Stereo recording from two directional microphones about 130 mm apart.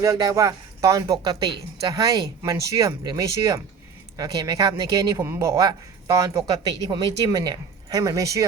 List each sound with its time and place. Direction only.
0.0 s speech: 25° right (ahead or behind)